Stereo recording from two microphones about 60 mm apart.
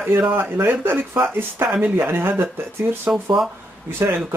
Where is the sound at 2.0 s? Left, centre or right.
Right.